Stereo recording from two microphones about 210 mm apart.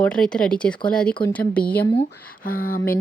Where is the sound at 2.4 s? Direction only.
45° left (ahead or behind).